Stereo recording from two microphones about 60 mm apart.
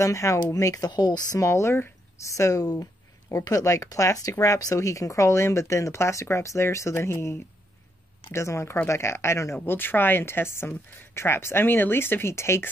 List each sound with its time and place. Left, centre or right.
0.0 s speech: left
1.5 s speech: left
2.2 s speech: left
9.7 s speech: left